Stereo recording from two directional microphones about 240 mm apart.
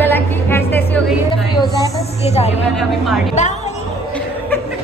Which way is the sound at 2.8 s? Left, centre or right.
Centre.